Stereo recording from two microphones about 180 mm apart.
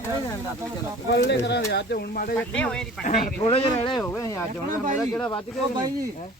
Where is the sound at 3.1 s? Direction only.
35° left (ahead or behind).